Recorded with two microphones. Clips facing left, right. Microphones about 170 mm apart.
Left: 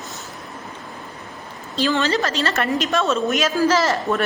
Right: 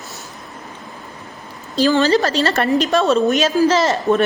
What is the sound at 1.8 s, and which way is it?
A woman's voice, 35° right (ahead or behind).